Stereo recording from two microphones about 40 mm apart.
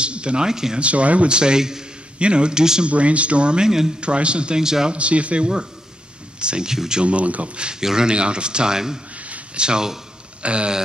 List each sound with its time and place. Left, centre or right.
0.0 s a sound: right
0.5 s speech: centre
0.7 s a man's voice: right; by 1.9 s centre
2.1 s a man's voice: right
2.9 s a man's voice: right; by 3.9 s centre
4.0 s a man's voice: right
4.9 s a man's voice: right
6.7 s speech: centre
7.0 s speech: right; by 9.0 s centre
9.1 s a sound: right
9.6 s a man's voice: centre